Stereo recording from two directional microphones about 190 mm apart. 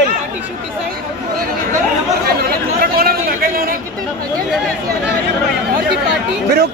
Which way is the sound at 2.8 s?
50° right (ahead or behind).